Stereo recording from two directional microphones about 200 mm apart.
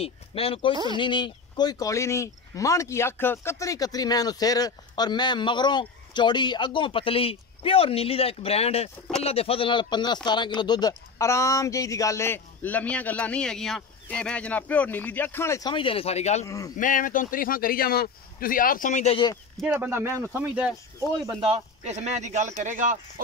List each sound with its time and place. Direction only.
0.0 s speech: 30° left (ahead or behind)
16.4 s speech: 15° left (ahead or behind)
16.7 s speech: 40° left (ahead or behind)
19.5 s speech: 5° right (ahead or behind)
21.3 s speech: 25° right (ahead or behind)